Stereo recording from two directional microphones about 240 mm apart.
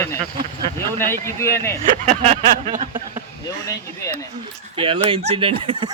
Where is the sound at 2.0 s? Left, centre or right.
Right.